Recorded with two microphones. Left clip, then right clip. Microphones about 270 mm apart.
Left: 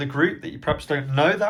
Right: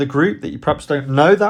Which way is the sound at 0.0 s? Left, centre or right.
Right.